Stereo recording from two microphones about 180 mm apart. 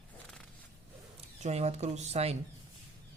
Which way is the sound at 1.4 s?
40° right (ahead or behind).